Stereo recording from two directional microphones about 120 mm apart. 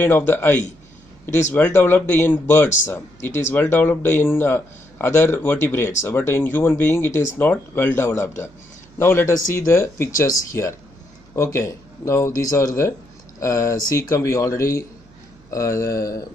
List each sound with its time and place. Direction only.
0.0 s a man's voice: 15° left (ahead or behind)
3.2 s speech: 90° left
3.5 s a man's voice: 15° left (ahead or behind)